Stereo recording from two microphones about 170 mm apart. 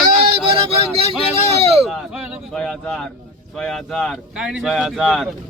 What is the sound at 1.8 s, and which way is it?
Speech, 5° right (ahead or behind).